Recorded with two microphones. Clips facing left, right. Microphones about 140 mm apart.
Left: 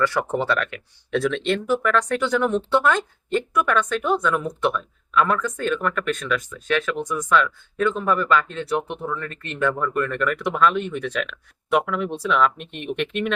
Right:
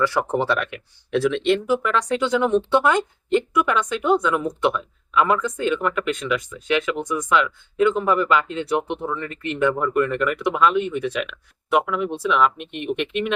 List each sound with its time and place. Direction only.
0.0 s speech: 10° right (ahead or behind)
10.0 s speech: 5° right (ahead or behind)